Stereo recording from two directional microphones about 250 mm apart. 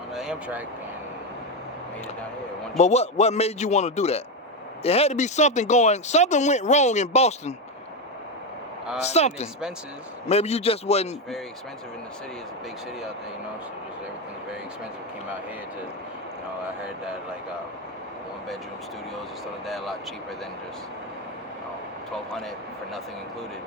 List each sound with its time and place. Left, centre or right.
0.1 s a sound: centre
2.7 s speech: left
9.0 s speech: left